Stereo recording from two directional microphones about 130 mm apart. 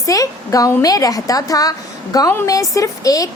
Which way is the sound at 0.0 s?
25° left (ahead or behind).